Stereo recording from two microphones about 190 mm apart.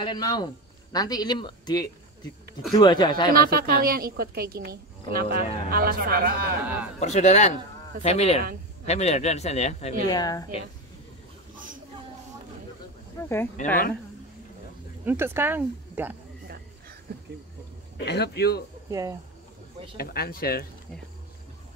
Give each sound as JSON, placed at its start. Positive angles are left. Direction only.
{"t": 0.0, "sound": "speech", "side_deg": 20}
{"t": 3.3, "sound": "a woman's voice", "side_deg": -50}
{"t": 6.6, "sound": "speech", "side_deg": -10}
{"t": 7.0, "sound": "speech", "side_deg": 35}
{"t": 10.0, "sound": "speech", "side_deg": 20}
{"t": 13.6, "sound": "speech", "side_deg": 40}
{"t": 15.0, "sound": "speech", "side_deg": -10}
{"t": 17.9, "sound": "a man's voice", "side_deg": 60}
{"t": 18.9, "sound": "speech", "side_deg": -15}
{"t": 20.0, "sound": "speech", "side_deg": 55}